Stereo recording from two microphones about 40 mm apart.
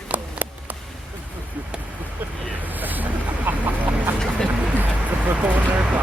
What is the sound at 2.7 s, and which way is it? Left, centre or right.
Vehicle, right.